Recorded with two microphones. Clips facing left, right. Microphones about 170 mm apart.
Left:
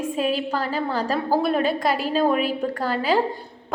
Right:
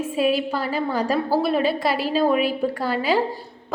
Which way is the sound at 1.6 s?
45° left (ahead or behind).